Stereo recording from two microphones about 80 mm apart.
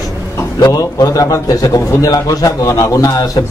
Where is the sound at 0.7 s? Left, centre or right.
Left.